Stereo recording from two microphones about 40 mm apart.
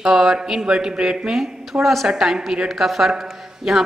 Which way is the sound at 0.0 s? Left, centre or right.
Centre.